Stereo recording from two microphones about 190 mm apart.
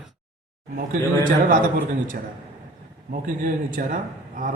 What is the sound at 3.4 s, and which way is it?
Speech, 45° right (ahead or behind).